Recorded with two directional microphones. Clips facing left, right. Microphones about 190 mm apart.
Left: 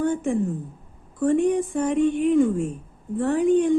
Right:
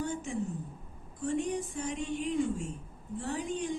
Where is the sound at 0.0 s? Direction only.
55° left (ahead or behind).